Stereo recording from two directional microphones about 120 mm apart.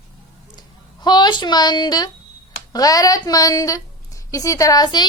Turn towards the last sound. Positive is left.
turn(degrees=35)  # may be behind; listen again after turning